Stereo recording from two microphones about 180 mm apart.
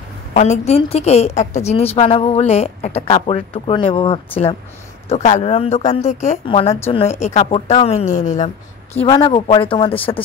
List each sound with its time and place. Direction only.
0.3 s speech: 40° left (ahead or behind)
5.1 s speech: 40° left (ahead or behind)
8.9 s speech: 30° left (ahead or behind)